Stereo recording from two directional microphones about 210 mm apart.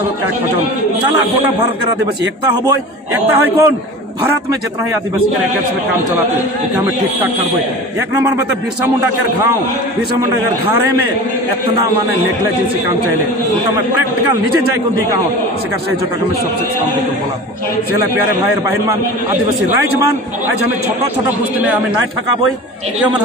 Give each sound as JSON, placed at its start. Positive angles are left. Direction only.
{"t": 3.3, "sound": "a man's voice", "side_deg": -15}